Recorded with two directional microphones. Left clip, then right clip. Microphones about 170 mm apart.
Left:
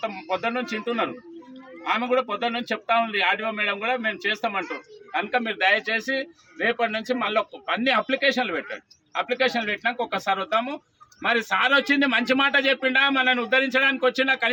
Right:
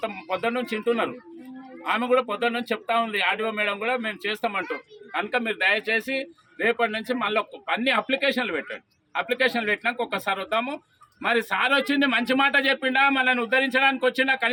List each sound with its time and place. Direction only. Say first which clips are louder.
0.0 s a man's voice: even; 20° right (ahead or behind)